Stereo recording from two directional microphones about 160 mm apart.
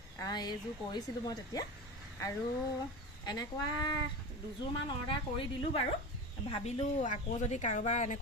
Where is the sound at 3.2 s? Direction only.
25° left (ahead or behind).